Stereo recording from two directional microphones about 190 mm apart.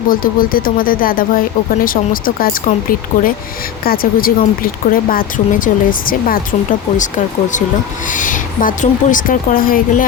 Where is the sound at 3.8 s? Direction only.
50° left (ahead or behind).